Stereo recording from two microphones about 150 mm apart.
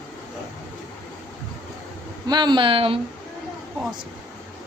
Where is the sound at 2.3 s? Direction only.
30° right (ahead or behind).